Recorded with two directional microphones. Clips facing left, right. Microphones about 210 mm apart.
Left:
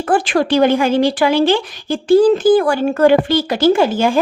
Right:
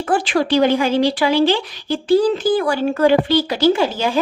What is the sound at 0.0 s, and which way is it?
A woman's voice, 50° left (ahead or behind).